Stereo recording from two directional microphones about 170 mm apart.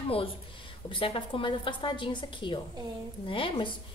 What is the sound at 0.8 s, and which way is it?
A woman's voice, 30° left (ahead or behind).